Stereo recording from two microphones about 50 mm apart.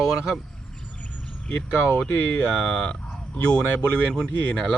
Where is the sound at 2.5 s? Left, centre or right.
Centre.